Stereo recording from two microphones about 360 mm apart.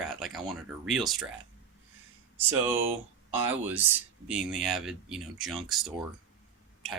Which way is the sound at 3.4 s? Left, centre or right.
Centre.